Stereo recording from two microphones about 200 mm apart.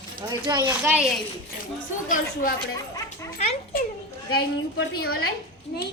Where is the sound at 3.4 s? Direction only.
35° left (ahead or behind).